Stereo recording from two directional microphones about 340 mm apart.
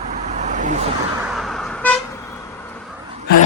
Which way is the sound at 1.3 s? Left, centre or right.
Centre.